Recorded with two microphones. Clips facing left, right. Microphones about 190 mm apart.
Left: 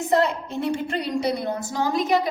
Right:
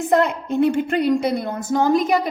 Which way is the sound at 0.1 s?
55° right (ahead or behind).